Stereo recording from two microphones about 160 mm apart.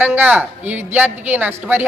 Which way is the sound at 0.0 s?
10° right (ahead or behind).